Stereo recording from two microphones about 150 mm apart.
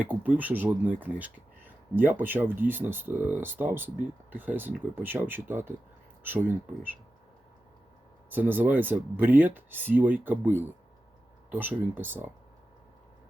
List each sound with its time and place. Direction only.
0.0 s speech: 10° right (ahead or behind)
8.3 s speech: 10° right (ahead or behind)